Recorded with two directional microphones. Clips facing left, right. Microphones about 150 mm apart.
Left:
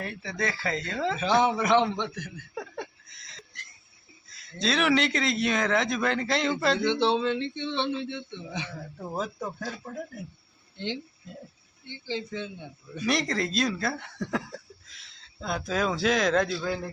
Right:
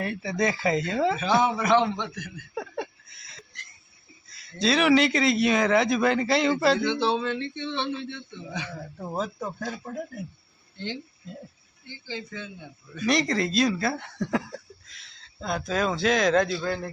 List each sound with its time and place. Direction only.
0.0 s speech: 10° right (ahead or behind)
1.5 s speech: 20° left (ahead or behind)
2.6 s a sound: 5° right (ahead or behind)
4.3 s speech: centre (ahead or behind)
7.0 s speech: 25° left (ahead or behind)
9.1 s speech: centre (ahead or behind)
10.8 s speech: 20° left (ahead or behind)
13.1 s speech: centre (ahead or behind)